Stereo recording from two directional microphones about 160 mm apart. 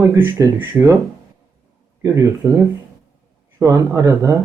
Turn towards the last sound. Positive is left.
turn(degrees=-20)  # may be behind; listen again after turning